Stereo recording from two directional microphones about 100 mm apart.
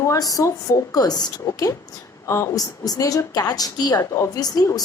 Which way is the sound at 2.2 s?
30° left (ahead or behind).